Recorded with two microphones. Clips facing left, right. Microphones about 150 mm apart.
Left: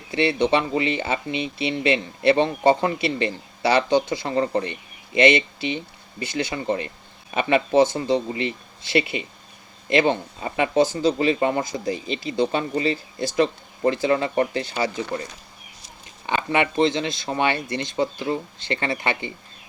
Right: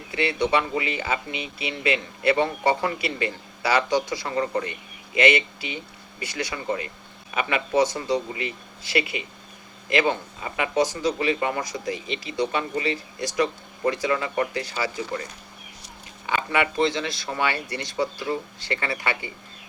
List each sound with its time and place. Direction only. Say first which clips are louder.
0.1 s speech: left 3 dB; 30° left (ahead or behind)
16.2 s speech: left 2 dB; 25° left (ahead or behind)